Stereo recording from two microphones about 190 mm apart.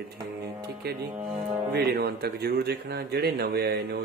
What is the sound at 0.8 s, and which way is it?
A man's voice, 55° right (ahead or behind).